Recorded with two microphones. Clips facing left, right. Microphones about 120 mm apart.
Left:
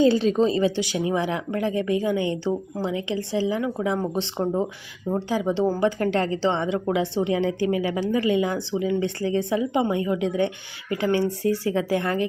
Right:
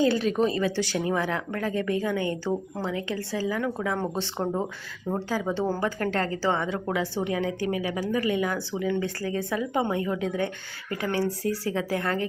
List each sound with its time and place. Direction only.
0.0 s a woman's voice: 25° left (ahead or behind)